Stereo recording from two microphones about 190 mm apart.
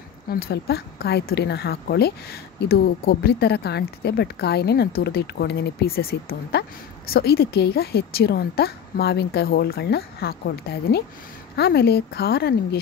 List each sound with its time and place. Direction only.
0.3 s a woman's voice: 55° left (ahead or behind)